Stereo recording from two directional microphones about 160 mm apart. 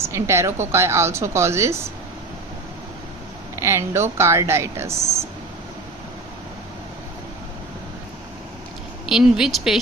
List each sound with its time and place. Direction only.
0.0 s a woman's voice: 15° right (ahead or behind)
3.6 s a woman's voice: 15° right (ahead or behind)
9.0 s a woman's voice: 5° right (ahead or behind)